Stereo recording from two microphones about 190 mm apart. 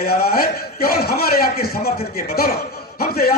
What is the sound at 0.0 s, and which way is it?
A man's voice, 50° left (ahead or behind).